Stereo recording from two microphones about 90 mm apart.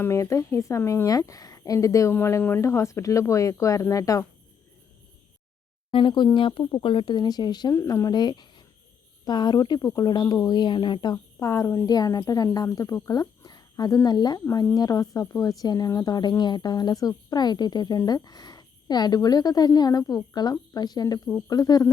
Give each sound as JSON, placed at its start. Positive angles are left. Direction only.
{"t": 0.0, "sound": "speech", "side_deg": 35}
{"t": 1.0, "sound": "speech", "side_deg": 40}
{"t": 2.1, "sound": "speech", "side_deg": 25}
{"t": 5.9, "sound": "speech", "side_deg": 65}
{"t": 7.8, "sound": "speech", "side_deg": 40}
{"t": 21.2, "sound": "speech", "side_deg": 35}
{"t": 21.5, "sound": "speech", "side_deg": 45}